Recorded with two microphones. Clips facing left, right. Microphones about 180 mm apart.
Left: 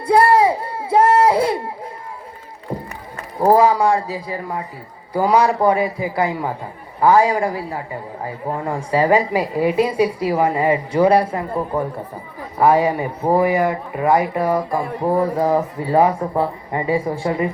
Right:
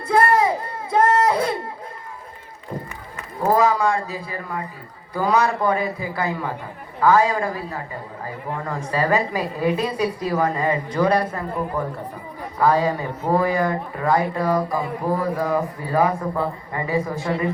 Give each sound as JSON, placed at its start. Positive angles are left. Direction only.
{"t": 0.1, "sound": "a sound", "side_deg": 30}
{"t": 3.4, "sound": "speech", "side_deg": 30}
{"t": 4.1, "sound": "speech", "side_deg": 20}
{"t": 5.1, "sound": "a woman's voice", "side_deg": 10}
{"t": 8.8, "sound": "a woman's voice", "side_deg": 15}
{"t": 12.5, "sound": "speech", "side_deg": 20}